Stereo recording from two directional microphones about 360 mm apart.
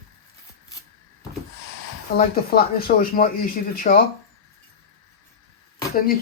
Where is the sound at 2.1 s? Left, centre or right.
Left.